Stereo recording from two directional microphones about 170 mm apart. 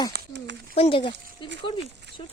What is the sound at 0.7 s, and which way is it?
Speech, 35° left (ahead or behind).